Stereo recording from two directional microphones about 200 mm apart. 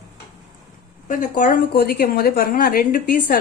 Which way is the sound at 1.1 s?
45° left (ahead or behind).